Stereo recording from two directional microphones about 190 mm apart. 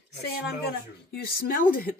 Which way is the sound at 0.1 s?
60° left (ahead or behind).